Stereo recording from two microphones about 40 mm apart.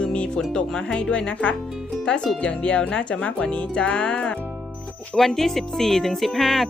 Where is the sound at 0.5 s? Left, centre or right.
Centre.